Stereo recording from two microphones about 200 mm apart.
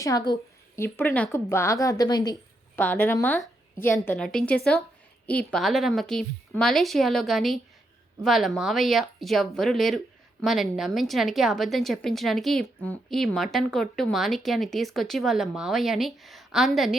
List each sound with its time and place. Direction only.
0.0 s a woman's voice: 20° left (ahead or behind); by 17.0 s centre (ahead or behind)